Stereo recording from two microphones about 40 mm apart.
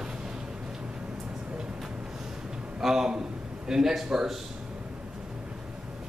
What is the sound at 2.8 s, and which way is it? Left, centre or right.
A man's voice, centre.